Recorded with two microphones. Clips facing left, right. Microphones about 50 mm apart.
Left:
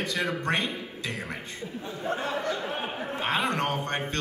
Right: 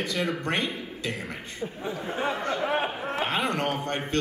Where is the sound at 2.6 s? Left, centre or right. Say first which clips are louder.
Right 5 dB; right.